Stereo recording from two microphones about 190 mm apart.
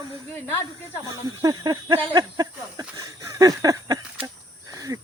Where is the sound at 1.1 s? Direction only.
20° right (ahead or behind).